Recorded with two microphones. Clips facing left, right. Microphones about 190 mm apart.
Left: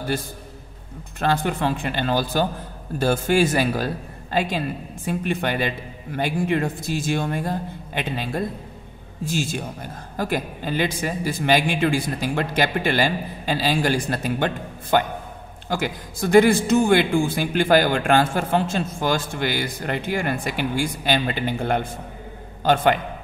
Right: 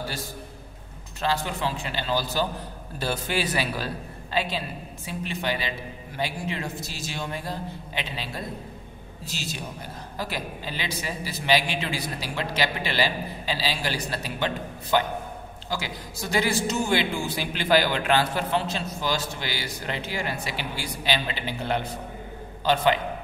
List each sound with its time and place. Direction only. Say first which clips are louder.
1.2 s a man's voice: left 5 dB; 55° left (ahead or behind)